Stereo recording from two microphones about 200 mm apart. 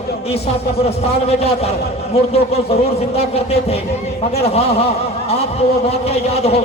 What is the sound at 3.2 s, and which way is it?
A man's voice, 30° left (ahead or behind).